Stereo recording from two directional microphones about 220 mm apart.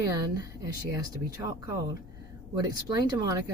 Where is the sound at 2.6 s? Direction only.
15° right (ahead or behind).